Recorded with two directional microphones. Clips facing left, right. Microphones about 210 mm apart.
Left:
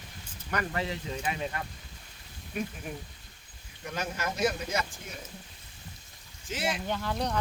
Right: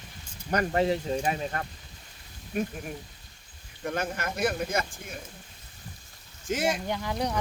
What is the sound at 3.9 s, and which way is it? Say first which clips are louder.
Speech: right 2 dB; 55° right (ahead or behind).